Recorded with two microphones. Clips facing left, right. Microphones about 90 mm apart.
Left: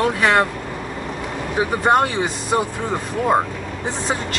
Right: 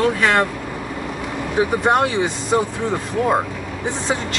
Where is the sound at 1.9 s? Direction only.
Centre (ahead or behind).